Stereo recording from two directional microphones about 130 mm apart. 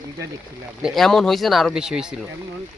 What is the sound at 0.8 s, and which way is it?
Speech, centre (ahead or behind).